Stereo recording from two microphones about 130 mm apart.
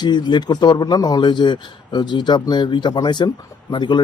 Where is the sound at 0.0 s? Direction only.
35° left (ahead or behind).